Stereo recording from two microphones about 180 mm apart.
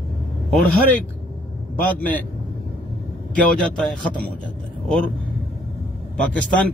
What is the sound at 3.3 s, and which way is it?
A man's voice, 5° left (ahead or behind).